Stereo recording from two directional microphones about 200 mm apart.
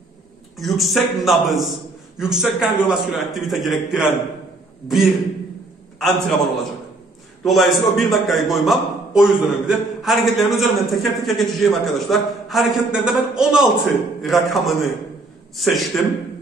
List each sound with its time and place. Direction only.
0.6 s a man's voice: centre (ahead or behind)
7.4 s a man's voice: centre (ahead or behind)